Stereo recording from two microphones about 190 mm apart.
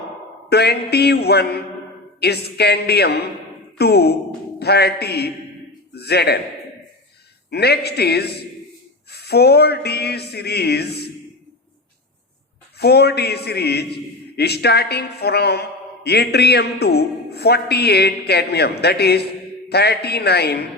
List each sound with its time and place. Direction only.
0.5 s a man's voice: 60° left (ahead or behind)
7.5 s a man's voice: 60° left (ahead or behind)
12.8 s a man's voice: 60° left (ahead or behind)